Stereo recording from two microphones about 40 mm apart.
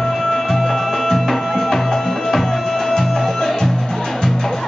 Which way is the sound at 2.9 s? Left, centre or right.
Centre.